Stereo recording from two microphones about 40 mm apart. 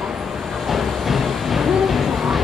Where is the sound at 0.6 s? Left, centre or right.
Centre.